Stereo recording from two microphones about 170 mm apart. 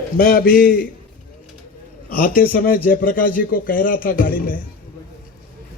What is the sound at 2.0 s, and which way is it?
Speech, 60° left (ahead or behind).